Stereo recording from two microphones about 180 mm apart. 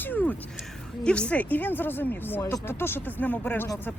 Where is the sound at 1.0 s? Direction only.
5° left (ahead or behind).